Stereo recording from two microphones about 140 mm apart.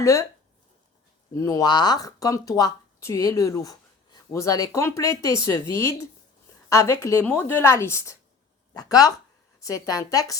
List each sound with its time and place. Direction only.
0.0 s speech: 20° left (ahead or behind)
1.3 s speech: 25° left (ahead or behind)